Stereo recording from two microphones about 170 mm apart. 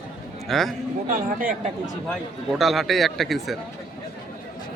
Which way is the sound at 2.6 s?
Centre (ahead or behind).